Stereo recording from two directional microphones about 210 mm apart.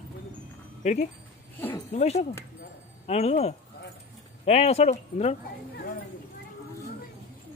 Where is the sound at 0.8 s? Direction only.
35° left (ahead or behind).